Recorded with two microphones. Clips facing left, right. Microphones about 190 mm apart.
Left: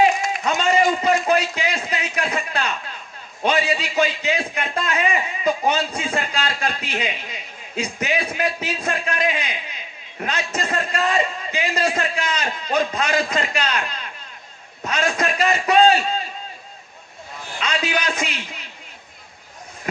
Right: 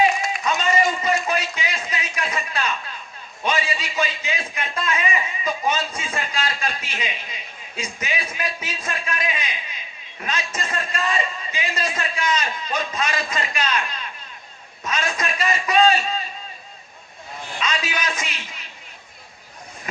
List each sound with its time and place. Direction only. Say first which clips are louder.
0.0 s a sound: left 2 dB; 55° left (ahead or behind)
3.4 s a man's voice: left 4 dB; 60° left (ahead or behind)
17.6 s a man's voice: left 3 dB; 60° left (ahead or behind)